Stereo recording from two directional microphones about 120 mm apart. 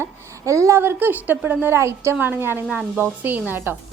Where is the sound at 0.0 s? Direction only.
25° right (ahead or behind).